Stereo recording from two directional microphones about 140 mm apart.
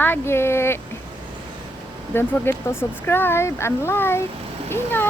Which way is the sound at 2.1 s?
15° left (ahead or behind).